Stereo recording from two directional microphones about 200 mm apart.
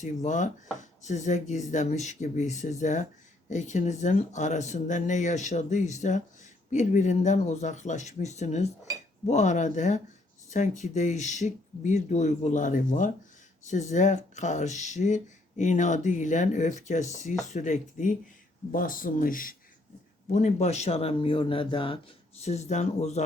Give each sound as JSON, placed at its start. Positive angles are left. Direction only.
{"t": 0.0, "sound": "speech", "side_deg": 35}